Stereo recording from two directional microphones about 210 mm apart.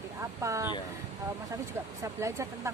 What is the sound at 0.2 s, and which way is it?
Speech, 15° right (ahead or behind).